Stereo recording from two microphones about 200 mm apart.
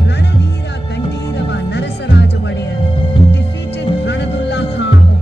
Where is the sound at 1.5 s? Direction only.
60° left (ahead or behind).